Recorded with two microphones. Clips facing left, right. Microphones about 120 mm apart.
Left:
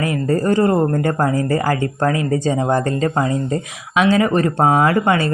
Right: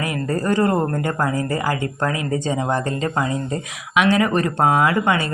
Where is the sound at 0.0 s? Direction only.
30° left (ahead or behind).